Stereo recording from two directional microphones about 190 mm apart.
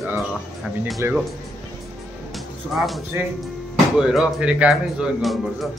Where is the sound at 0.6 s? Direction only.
Centre (ahead or behind).